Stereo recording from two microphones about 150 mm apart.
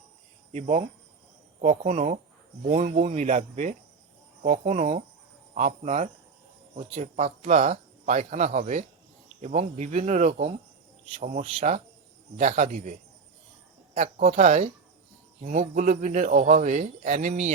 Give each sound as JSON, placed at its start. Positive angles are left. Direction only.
{"t": 0.5, "sound": "speech", "side_deg": -45}
{"t": 13.9, "sound": "speech", "side_deg": -55}